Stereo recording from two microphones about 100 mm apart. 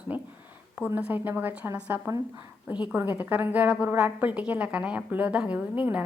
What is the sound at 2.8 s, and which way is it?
A woman's voice, 15° right (ahead or behind).